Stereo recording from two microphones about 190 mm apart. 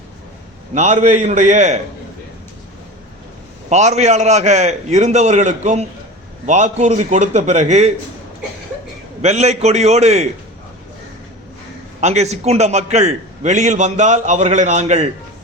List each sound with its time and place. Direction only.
0.7 s a man's voice: 35° right (ahead or behind)
3.7 s a man's voice: 35° right (ahead or behind)
9.2 s a man's voice: 35° right (ahead or behind)
11.9 s a man's voice: 35° right (ahead or behind)